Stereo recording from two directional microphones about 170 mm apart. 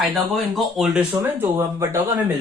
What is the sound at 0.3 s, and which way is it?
Speech, centre (ahead or behind).